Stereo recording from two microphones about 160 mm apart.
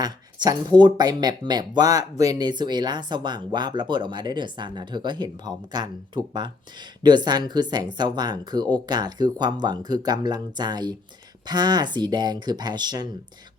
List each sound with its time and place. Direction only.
0.0 s speech: 25° right (ahead or behind)